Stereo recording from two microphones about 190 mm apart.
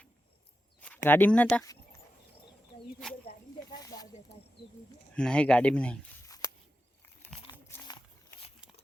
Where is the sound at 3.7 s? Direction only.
20° left (ahead or behind).